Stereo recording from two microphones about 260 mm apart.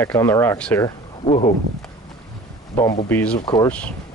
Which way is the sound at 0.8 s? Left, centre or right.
Left.